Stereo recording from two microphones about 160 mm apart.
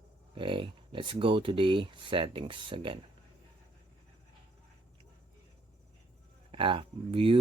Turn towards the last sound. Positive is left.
turn(degrees=-35)  # may be behind; listen again after turning